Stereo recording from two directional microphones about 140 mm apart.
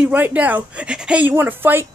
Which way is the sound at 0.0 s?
10° right (ahead or behind).